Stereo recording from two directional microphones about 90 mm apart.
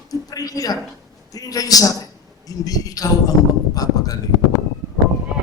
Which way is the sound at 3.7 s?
45° left (ahead or behind).